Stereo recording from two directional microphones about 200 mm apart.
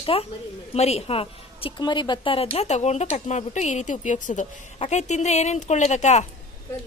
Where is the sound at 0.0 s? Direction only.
30° left (ahead or behind).